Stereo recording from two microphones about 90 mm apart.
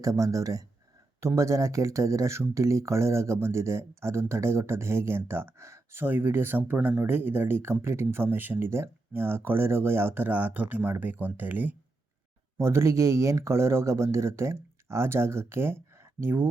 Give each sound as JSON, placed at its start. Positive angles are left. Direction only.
{"t": 0.0, "sound": "speech", "side_deg": -40}
{"t": 6.7, "sound": "speech", "side_deg": -10}
{"t": 7.0, "sound": "speech", "side_deg": -25}
{"t": 12.5, "sound": "speech", "side_deg": -30}